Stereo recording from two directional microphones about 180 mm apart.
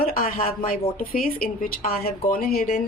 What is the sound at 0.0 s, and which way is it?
Speech, 50° left (ahead or behind).